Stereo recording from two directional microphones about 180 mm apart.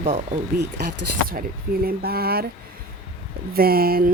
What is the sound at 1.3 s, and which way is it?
Speech, 55° right (ahead or behind).